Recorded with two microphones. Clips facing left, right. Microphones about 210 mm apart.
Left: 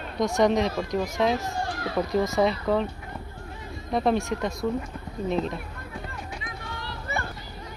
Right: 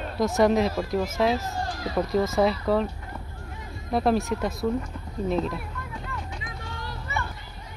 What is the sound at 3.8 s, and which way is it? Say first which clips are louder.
Speech: right 1 dB; centre (ahead or behind).